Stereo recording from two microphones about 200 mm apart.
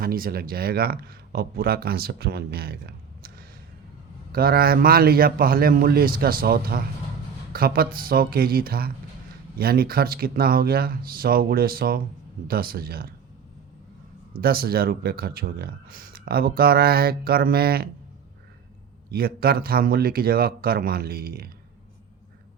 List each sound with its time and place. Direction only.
0.0 s speech: 45° right (ahead or behind)
14.4 s speech: 50° right (ahead or behind)
19.1 s speech: 50° right (ahead or behind)